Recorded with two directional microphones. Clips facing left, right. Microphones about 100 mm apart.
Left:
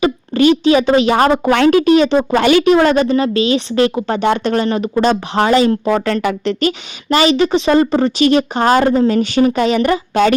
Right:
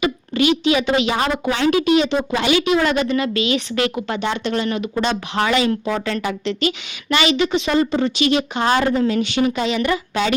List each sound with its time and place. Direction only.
0.0 s a woman's voice: 40° left (ahead or behind)
4.2 s a woman's voice: 45° left (ahead or behind)